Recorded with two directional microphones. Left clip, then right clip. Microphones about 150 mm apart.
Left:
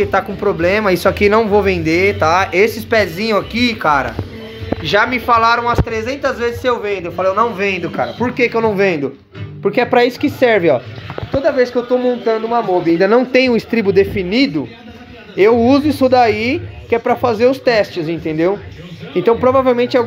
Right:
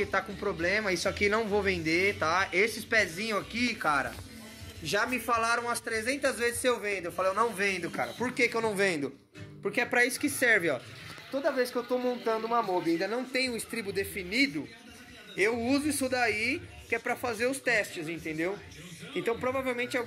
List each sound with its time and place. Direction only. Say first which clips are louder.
0.0 s speech: left 15 dB; 5° right (ahead or behind)
0.7 s speech: left 14 dB; 10° left (ahead or behind)
0.9 s speech: left 17 dB; 20° left (ahead or behind)
1.2 s speech: left 15 dB; centre (ahead or behind)
4.8 s speech: left 16 dB; 25° right (ahead or behind)
7.5 s speech: left 13 dB; centre (ahead or behind)
9.7 s speech: left 15 dB; 10° left (ahead or behind)
13.0 s speech: left 19 dB; 55° left (ahead or behind)
15.3 s speech: left 18 dB; 20° left (ahead or behind)